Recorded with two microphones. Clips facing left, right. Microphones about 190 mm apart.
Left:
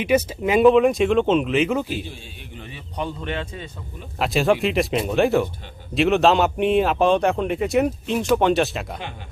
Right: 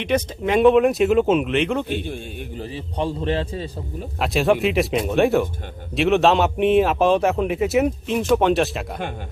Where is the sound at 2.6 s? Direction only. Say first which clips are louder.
Right 4 dB; 30° right (ahead or behind).